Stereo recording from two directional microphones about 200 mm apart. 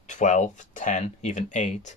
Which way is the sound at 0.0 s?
35° left (ahead or behind).